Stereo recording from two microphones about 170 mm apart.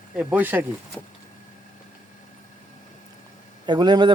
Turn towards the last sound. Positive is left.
turn(degrees=-25)  # may be behind; listen again after turning